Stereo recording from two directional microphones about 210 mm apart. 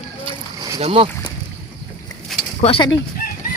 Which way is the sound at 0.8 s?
25° right (ahead or behind).